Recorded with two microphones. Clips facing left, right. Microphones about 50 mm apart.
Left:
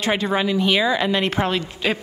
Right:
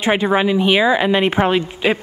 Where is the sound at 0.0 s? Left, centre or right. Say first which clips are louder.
Right 5 dB; centre.